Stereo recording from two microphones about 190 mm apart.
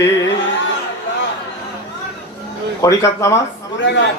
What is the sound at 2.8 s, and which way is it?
Speech, 15° left (ahead or behind).